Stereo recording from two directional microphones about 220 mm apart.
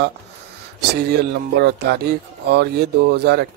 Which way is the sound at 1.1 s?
50° right (ahead or behind).